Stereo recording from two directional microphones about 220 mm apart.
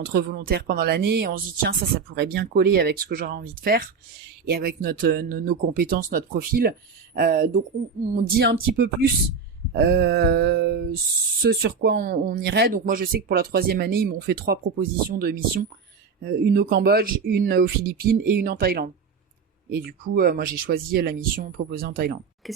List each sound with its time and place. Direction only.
0.1 s speech: 50° right (ahead or behind)
22.4 s speech: centre (ahead or behind)